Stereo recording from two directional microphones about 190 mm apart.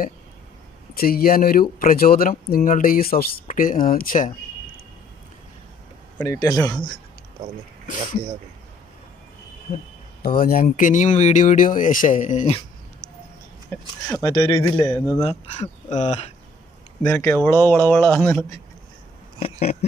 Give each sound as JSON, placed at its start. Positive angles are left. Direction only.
{"t": 0.9, "sound": "speech", "side_deg": 50}
{"t": 6.1, "sound": "speech", "side_deg": 15}
{"t": 10.2, "sound": "speech", "side_deg": 50}
{"t": 13.7, "sound": "speech", "side_deg": 5}
{"t": 14.2, "sound": "speech", "side_deg": 25}
{"t": 14.8, "sound": "speech", "side_deg": 15}
{"t": 15.1, "sound": "speech", "side_deg": 30}
{"t": 17.0, "sound": "speech", "side_deg": 5}
{"t": 19.4, "sound": "speech", "side_deg": 35}